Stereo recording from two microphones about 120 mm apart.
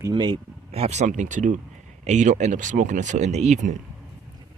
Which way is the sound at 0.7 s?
65° right (ahead or behind).